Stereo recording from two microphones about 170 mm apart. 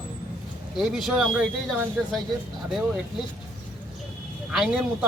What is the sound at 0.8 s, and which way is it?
Speech, centre (ahead or behind).